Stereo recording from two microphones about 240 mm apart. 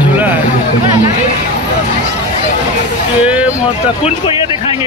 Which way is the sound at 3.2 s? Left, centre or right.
Centre.